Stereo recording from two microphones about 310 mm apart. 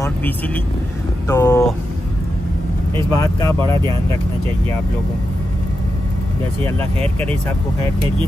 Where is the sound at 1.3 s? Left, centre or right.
Centre.